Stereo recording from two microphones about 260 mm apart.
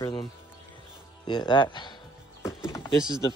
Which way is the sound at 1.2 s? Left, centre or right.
Centre.